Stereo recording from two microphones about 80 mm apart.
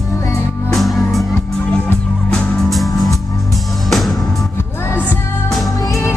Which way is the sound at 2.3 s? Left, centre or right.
Centre.